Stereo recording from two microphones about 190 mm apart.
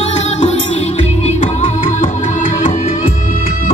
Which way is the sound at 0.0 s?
35° left (ahead or behind).